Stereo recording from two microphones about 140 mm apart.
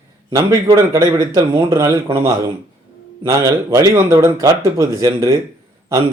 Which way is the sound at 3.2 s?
20° right (ahead or behind).